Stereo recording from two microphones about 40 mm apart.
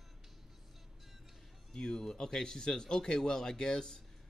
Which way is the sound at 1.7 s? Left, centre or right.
Centre.